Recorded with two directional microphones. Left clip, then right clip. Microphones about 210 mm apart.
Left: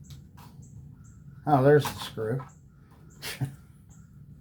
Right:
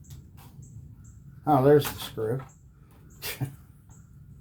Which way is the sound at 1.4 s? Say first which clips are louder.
Right 1 dB; 20° left (ahead or behind).